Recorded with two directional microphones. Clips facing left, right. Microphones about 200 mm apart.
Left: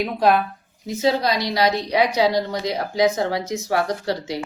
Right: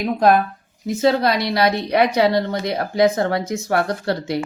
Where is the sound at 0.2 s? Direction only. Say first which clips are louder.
Right 3 dB; 45° right (ahead or behind).